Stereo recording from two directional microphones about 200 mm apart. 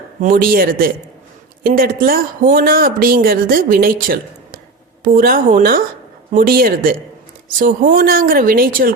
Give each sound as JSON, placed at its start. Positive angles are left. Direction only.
{"t": 0.2, "sound": "speech", "side_deg": -40}